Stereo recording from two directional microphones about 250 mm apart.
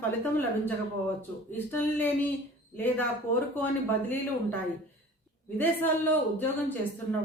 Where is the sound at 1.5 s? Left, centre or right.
Centre.